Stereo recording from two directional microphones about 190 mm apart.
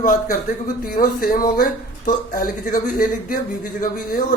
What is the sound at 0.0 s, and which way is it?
Speech, 45° left (ahead or behind).